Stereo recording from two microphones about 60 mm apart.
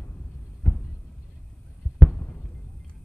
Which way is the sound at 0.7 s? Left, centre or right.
Centre.